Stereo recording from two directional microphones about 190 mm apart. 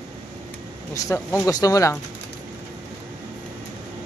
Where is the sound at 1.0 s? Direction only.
10° left (ahead or behind).